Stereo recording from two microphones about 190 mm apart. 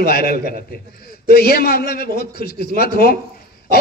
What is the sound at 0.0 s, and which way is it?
A man's voice, 50° left (ahead or behind).